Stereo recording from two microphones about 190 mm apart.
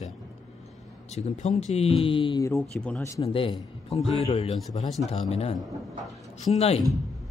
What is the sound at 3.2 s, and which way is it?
A man's voice, 30° left (ahead or behind).